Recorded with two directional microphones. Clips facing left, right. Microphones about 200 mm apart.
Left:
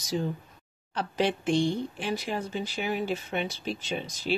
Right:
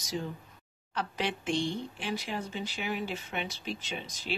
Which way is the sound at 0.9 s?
35° left (ahead or behind).